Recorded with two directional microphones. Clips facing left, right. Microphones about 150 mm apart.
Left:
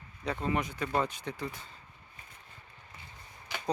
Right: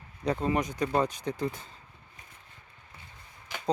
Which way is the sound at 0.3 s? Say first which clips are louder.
Right 4 dB; 20° right (ahead or behind).